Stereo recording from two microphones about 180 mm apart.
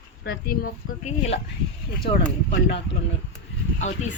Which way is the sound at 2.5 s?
80° left.